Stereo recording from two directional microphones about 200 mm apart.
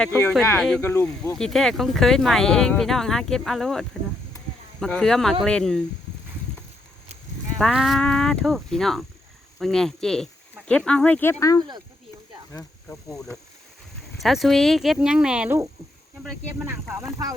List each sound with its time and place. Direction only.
0.1 s speech: 15° left (ahead or behind)
1.4 s speech: centre (ahead or behind)
7.6 s speech: centre (ahead or behind); by 13.1 s 15° left (ahead or behind)
13.1 s speech: 5° left (ahead or behind); by 17.1 s 10° right (ahead or behind)